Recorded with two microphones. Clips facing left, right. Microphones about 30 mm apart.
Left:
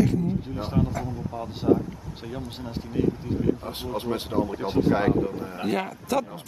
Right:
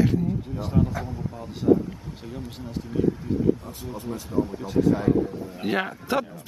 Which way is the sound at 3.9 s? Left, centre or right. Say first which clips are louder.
Left 1 dB; left.